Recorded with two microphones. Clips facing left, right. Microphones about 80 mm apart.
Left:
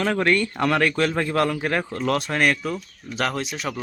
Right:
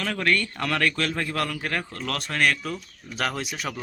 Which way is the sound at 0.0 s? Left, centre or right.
Left.